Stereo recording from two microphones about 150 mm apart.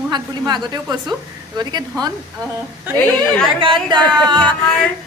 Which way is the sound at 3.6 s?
35° right (ahead or behind).